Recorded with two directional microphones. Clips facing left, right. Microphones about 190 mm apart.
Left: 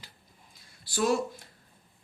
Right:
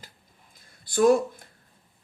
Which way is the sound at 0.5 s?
50° right (ahead or behind).